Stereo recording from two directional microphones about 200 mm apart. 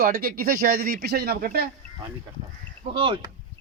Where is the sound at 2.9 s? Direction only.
25° right (ahead or behind).